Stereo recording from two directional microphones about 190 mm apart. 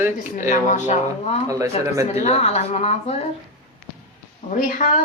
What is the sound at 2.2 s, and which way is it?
Speech, 35° left (ahead or behind).